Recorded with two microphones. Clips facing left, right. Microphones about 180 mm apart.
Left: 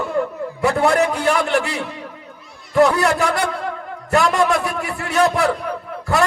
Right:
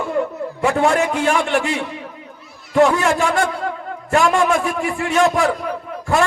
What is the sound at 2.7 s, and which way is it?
A man's voice, 40° left (ahead or behind).